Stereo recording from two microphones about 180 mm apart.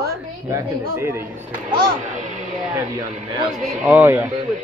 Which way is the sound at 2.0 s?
45° right (ahead or behind).